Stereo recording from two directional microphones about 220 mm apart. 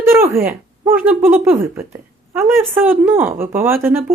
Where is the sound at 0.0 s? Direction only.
10° right (ahead or behind).